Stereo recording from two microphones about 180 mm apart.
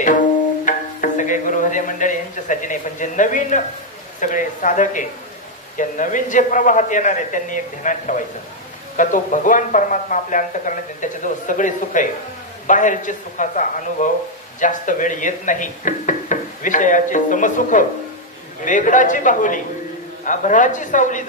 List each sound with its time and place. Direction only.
0.7 s music: 45° left (ahead or behind)
4.2 s speech: 45° left (ahead or behind)